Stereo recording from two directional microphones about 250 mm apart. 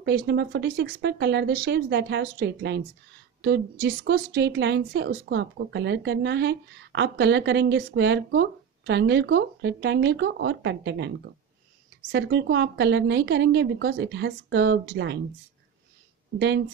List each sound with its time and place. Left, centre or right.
0.0 s a woman's voice: right
16.3 s a woman's voice: right